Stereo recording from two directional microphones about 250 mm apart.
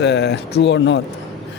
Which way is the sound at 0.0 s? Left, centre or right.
Left.